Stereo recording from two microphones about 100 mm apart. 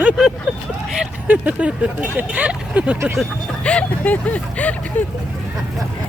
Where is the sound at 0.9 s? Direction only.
15° right (ahead or behind).